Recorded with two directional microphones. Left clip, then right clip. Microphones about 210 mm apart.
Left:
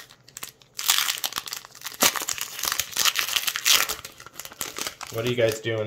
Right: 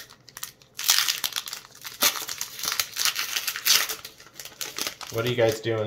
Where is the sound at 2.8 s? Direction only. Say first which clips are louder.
Left 3 dB; 30° left (ahead or behind).